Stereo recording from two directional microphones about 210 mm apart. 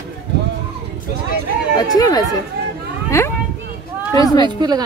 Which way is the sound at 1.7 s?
20° left (ahead or behind).